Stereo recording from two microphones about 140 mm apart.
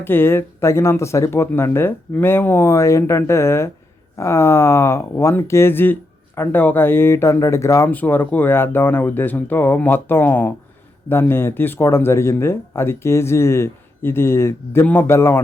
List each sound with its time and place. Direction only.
0.0 s speech: 15° left (ahead or behind)